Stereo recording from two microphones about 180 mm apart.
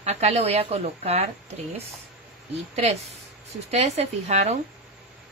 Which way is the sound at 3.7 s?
40° right (ahead or behind).